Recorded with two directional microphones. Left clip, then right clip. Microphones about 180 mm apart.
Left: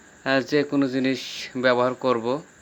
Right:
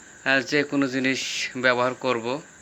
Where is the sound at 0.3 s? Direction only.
35° left (ahead or behind).